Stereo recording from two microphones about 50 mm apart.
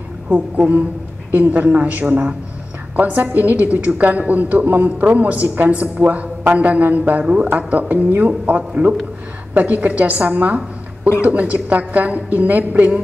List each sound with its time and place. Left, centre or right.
0.3 s a woman's voice: right